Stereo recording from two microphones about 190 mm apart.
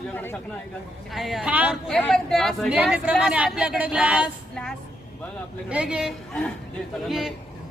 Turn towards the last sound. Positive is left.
turn(degrees=0)  # may be behind; listen again after turning